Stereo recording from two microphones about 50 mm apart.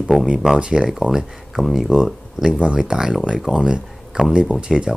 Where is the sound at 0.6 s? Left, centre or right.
Centre.